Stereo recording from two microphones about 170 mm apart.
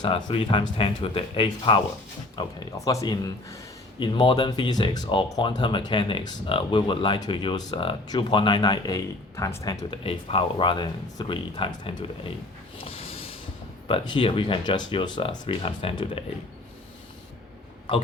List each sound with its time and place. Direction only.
0.0 s speech: 30° left (ahead or behind)
12.8 s a sound: 35° left (ahead or behind)
13.8 s speech: 30° left (ahead or behind)